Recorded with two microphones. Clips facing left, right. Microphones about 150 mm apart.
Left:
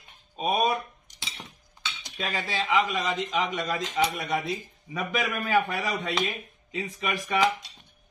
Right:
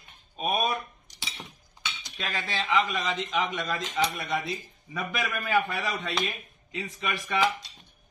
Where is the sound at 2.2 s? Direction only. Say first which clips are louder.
Left 2 dB; 10° left (ahead or behind).